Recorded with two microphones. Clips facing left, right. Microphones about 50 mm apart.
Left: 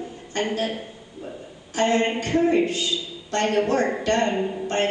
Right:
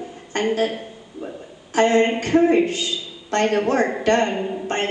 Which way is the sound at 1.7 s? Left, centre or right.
Right.